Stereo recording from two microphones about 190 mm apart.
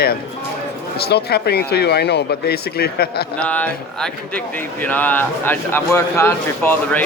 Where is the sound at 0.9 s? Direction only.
55° left (ahead or behind).